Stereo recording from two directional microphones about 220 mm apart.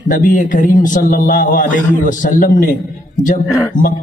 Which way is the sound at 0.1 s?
35° left (ahead or behind).